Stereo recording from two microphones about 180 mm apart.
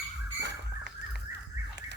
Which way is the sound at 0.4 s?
75° right (ahead or behind).